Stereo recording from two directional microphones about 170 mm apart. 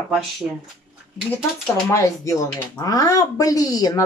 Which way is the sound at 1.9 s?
20° left (ahead or behind).